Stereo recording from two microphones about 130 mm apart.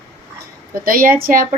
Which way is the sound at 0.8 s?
90° right.